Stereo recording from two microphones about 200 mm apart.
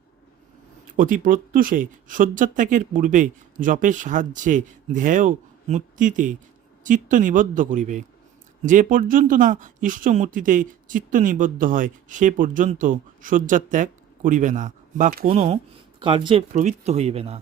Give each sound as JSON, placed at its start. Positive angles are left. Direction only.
{"t": 0.9, "sound": "speech", "side_deg": -40}
{"t": 16.5, "sound": "speech", "side_deg": -35}